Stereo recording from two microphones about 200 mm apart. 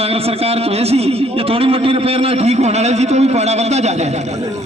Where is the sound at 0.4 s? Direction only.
30° right (ahead or behind).